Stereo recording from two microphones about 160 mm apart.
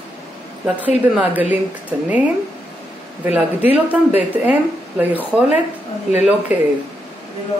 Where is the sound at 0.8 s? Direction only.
10° right (ahead or behind).